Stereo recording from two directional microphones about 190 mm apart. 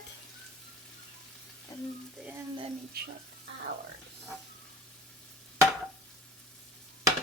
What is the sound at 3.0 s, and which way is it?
Speech, 55° right (ahead or behind).